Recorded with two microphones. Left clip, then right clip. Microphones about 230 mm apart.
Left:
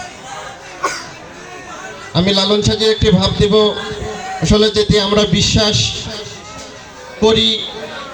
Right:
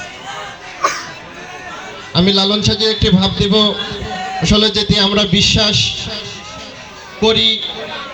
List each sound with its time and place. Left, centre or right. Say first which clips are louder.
2.1 s speech: even; left
7.2 s speech: even; left